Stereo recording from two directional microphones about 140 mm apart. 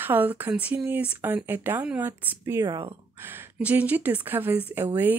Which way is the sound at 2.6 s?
30° right (ahead or behind).